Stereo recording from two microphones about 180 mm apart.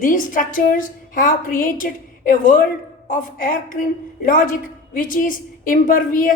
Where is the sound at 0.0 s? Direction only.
50° left (ahead or behind).